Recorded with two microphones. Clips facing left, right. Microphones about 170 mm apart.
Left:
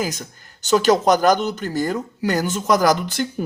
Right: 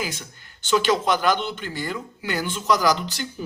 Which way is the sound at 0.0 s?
40° left (ahead or behind).